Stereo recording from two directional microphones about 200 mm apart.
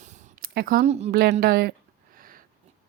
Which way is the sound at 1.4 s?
50° right (ahead or behind).